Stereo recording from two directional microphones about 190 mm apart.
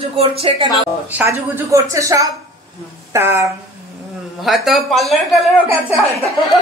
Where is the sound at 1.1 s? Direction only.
10° right (ahead or behind).